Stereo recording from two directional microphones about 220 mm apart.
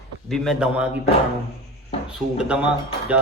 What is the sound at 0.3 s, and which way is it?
Speech, centre (ahead or behind).